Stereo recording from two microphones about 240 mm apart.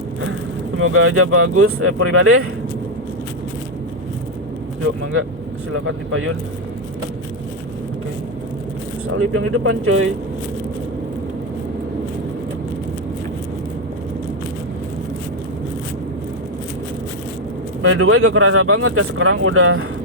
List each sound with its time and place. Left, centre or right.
0.8 s speech: right
5.7 s speech: right
9.0 s speech: right
17.8 s speech: right